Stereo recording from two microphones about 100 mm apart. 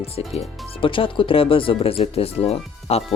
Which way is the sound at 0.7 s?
60° left (ahead or behind).